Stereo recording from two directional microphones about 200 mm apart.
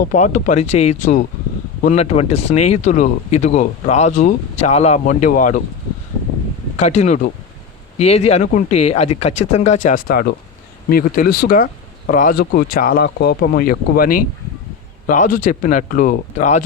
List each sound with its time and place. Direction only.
0.0 s speech: 40° left (ahead or behind)
6.7 s speech: 35° left (ahead or behind)